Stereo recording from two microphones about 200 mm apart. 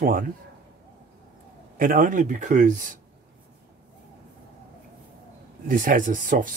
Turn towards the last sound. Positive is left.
turn(degrees=-40)  # may be behind; listen again after turning